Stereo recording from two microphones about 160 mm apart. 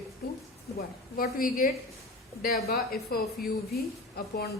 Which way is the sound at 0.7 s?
65° left (ahead or behind).